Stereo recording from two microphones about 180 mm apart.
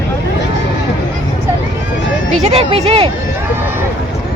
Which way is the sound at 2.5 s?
35° right (ahead or behind).